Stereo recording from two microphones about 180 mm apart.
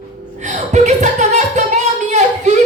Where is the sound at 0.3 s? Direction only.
40° right (ahead or behind).